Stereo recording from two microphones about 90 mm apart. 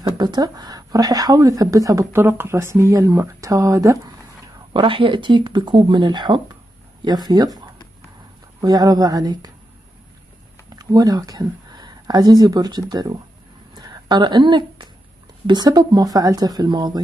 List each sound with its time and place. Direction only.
0.0 s speech: 50° right (ahead or behind)
2.1 s speech: 25° right (ahead or behind)
4.7 s speech: 70° right (ahead or behind); by 9.5 s 45° right (ahead or behind)
10.8 s speech: 40° right (ahead or behind)
13.7 s a sound: 55° right (ahead or behind)
15.4 s speech: 50° right (ahead or behind)